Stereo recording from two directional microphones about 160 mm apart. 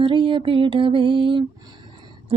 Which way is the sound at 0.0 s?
30° right (ahead or behind).